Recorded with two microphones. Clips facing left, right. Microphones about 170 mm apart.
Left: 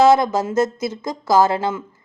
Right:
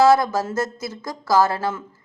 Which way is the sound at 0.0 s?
20° left (ahead or behind).